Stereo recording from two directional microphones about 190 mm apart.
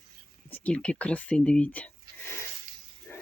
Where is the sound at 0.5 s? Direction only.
5° left (ahead or behind).